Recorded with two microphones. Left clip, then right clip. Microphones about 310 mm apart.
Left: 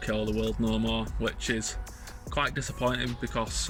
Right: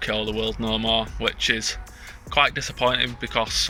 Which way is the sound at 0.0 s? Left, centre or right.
Centre.